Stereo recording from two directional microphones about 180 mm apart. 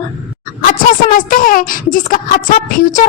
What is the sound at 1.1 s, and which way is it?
A woman's voice, 50° left (ahead or behind).